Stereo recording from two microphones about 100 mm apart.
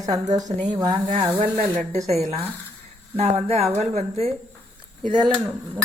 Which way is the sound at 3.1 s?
90° right.